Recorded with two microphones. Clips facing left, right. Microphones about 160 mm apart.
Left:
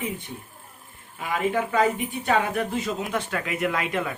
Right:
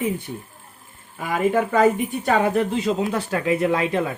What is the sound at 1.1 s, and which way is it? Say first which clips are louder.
Speech: right 5 dB; 45° right (ahead or behind).